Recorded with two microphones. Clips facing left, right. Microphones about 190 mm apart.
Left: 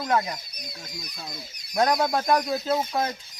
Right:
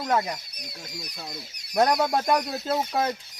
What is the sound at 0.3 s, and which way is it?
Speech, 70° right (ahead or behind).